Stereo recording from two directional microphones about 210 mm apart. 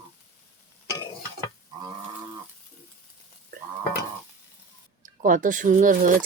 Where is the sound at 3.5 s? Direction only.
40° right (ahead or behind).